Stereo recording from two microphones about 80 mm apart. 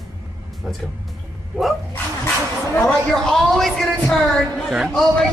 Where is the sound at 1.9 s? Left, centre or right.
Left.